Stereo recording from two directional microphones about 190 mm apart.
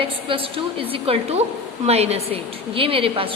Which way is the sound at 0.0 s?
30° right (ahead or behind).